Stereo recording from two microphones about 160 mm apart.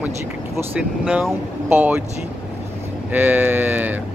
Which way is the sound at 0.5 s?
10° right (ahead or behind).